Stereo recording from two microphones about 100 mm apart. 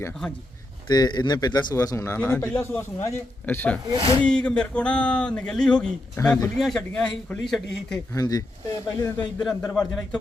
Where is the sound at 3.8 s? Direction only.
60° right (ahead or behind).